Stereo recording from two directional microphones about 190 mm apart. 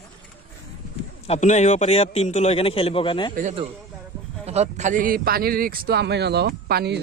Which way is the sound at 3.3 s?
40° right (ahead or behind).